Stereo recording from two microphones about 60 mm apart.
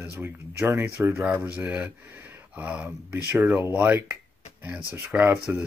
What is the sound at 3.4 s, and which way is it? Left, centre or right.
Speech, right.